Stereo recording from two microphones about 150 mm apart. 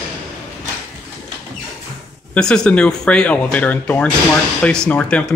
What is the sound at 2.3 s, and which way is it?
Speech, 5° left (ahead or behind).